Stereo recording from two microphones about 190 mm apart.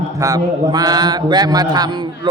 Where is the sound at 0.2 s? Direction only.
20° right (ahead or behind).